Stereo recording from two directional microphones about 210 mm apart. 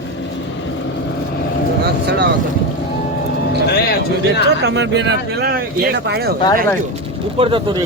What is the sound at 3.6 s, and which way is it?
Speech, 50° left (ahead or behind).